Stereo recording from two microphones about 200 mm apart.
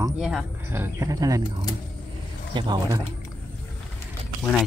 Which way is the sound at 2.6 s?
20° right (ahead or behind).